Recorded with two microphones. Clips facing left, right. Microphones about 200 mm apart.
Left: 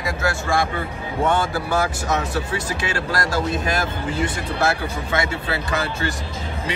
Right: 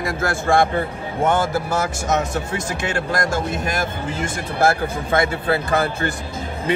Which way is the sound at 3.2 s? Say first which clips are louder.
Even; 50° right (ahead or behind).